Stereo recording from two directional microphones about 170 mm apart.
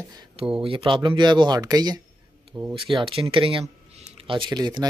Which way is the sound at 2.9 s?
30° right (ahead or behind).